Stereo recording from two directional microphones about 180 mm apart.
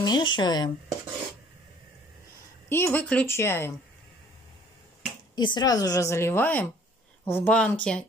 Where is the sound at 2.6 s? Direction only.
15° left (ahead or behind).